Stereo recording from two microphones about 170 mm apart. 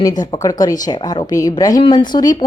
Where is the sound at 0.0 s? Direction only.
25° left (ahead or behind).